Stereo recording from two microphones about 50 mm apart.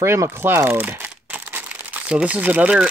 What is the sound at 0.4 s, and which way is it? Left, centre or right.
Speech, right.